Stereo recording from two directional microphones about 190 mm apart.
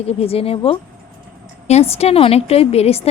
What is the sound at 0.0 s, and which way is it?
A woman's voice, 30° left (ahead or behind).